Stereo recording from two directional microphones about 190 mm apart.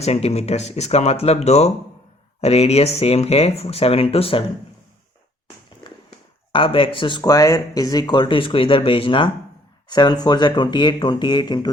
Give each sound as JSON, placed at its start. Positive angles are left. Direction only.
{"t": 0.0, "sound": "speech", "side_deg": 35}
{"t": 6.5, "sound": "speech", "side_deg": 30}